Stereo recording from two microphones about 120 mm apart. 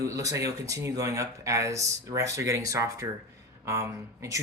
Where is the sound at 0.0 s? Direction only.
25° right (ahead or behind).